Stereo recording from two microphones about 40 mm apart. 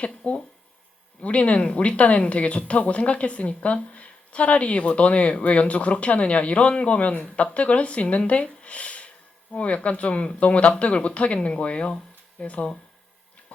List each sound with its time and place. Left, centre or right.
0.2 s speech: left
1.2 s speech: left